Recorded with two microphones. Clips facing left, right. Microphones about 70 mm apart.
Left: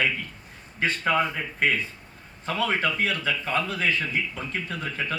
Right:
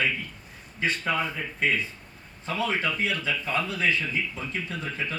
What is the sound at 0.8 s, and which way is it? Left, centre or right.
Speech, left.